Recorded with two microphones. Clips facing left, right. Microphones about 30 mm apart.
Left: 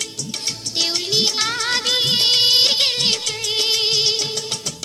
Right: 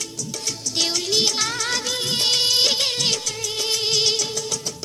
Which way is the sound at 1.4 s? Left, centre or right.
Left.